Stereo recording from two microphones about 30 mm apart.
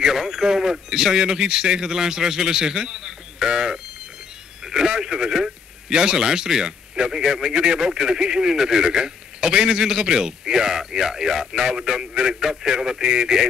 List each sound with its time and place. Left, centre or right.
0.0 s a man's voice: centre